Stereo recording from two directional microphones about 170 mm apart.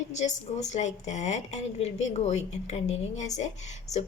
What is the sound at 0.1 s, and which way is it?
A woman's voice, 45° left (ahead or behind).